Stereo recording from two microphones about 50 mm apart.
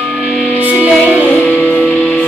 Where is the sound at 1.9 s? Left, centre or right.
Left.